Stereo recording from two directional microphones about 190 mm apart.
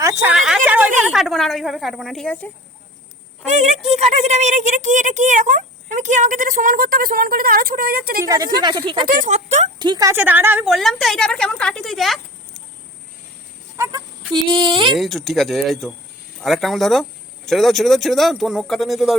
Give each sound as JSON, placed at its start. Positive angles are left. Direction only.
{"t": 0.0, "sound": "a sound", "side_deg": -15}
{"t": 0.3, "sound": "a sound", "side_deg": -5}
{"t": 1.0, "sound": "speech", "side_deg": 0}
{"t": 3.6, "sound": "speech", "side_deg": -35}
{"t": 8.2, "sound": "a woman's voice", "side_deg": -15}
{"t": 9.0, "sound": "speech", "side_deg": -40}
{"t": 9.7, "sound": "speech", "side_deg": -20}
{"t": 13.7, "sound": "speech", "side_deg": -15}
{"t": 14.4, "sound": "speech", "side_deg": -25}
{"t": 14.9, "sound": "speech", "side_deg": 0}